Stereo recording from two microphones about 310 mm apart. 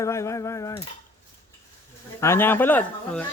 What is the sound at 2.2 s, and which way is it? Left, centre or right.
Speech, centre.